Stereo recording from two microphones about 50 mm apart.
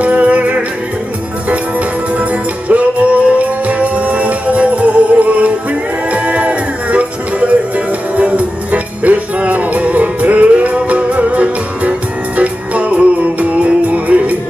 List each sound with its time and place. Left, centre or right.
0.0 s music: right